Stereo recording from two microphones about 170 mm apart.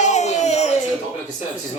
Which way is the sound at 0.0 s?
40° left (ahead or behind).